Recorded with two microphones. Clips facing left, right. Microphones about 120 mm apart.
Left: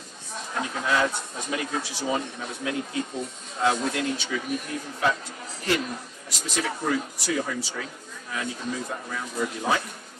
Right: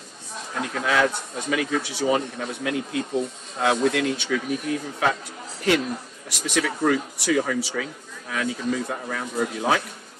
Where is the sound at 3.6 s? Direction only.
70° right (ahead or behind).